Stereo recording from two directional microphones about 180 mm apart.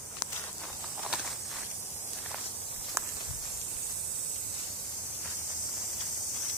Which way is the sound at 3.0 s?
15° right (ahead or behind).